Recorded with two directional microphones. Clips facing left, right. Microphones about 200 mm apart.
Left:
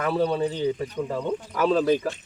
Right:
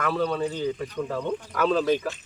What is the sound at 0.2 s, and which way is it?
Speech, 30° left (ahead or behind).